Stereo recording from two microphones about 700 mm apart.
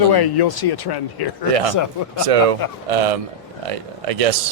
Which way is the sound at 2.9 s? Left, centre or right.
Right.